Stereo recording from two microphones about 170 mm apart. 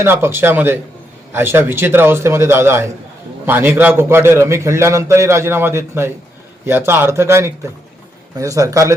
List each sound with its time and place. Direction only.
0.0 s a man's voice: 15° right (ahead or behind)